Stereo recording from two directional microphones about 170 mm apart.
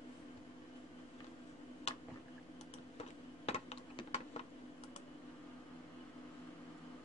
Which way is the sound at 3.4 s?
35° left (ahead or behind).